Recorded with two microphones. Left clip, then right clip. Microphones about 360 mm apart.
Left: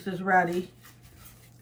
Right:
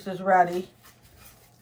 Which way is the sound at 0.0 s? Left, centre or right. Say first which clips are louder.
Right 3 dB; centre.